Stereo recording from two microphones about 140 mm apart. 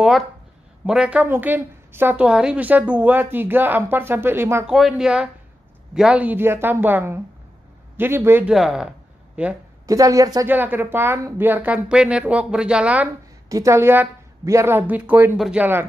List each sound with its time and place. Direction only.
0.8 s a woman's voice: 5° right (ahead or behind)
4.6 s a woman's voice: centre (ahead or behind)
8.5 s a woman's voice: 5° right (ahead or behind)
9.8 s a woman's voice: 25° right (ahead or behind)
10.5 s a woman's voice: 15° right (ahead or behind)
13.5 s a woman's voice: 20° right (ahead or behind)
15.3 s speech: centre (ahead or behind)
15.6 s a woman's voice: 15° right (ahead or behind)